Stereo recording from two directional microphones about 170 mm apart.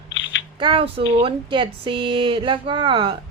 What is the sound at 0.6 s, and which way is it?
Speech, 30° right (ahead or behind).